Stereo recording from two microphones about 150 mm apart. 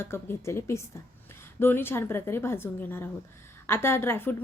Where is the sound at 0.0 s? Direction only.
15° left (ahead or behind).